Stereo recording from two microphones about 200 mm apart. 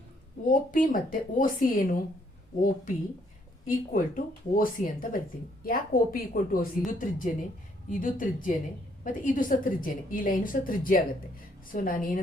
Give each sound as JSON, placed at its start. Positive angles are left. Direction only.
{"t": 0.5, "sound": "a woman's voice", "side_deg": 40}